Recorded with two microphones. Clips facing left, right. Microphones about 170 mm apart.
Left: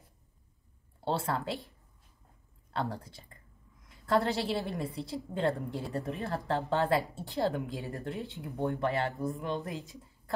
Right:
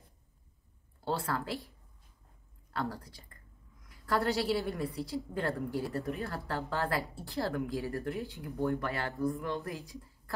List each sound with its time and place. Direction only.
1.0 s speech: 25° left (ahead or behind)
2.7 s a woman's voice: 25° left (ahead or behind)